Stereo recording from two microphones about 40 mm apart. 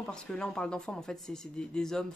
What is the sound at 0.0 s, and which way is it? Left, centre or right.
Speech, left.